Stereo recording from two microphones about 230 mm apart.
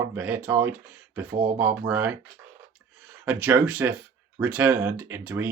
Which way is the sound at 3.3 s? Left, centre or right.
Centre.